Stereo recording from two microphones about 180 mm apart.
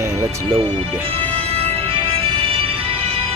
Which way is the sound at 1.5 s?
35° right (ahead or behind).